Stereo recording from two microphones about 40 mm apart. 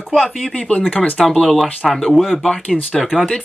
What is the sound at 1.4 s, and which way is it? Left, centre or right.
Speech, centre.